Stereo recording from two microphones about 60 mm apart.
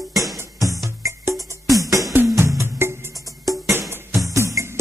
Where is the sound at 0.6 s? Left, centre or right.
Right.